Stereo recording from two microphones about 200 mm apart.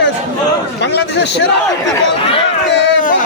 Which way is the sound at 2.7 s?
65° left (ahead or behind).